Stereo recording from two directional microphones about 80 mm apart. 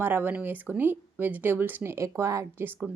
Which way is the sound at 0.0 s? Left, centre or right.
Right.